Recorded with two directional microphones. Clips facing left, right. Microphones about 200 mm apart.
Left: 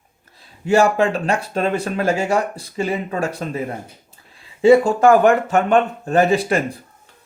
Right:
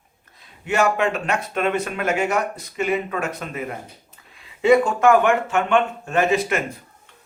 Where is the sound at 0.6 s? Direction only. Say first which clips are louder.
Left 5 dB; 30° left (ahead or behind).